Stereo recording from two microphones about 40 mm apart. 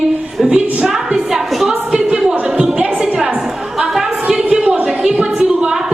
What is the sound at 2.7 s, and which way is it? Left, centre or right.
Music, centre.